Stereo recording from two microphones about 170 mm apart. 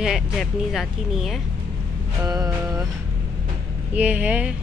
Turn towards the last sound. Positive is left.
turn(degrees=-10)  # may be behind; listen again after turning